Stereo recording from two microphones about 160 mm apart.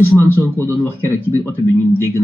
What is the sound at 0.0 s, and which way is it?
Speech, 15° left (ahead or behind).